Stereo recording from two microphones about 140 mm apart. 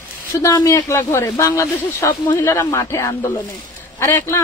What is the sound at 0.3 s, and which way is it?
Speech, 20° left (ahead or behind).